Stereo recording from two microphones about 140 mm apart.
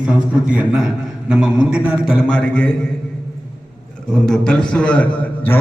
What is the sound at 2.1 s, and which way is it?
Speech, 5° left (ahead or behind).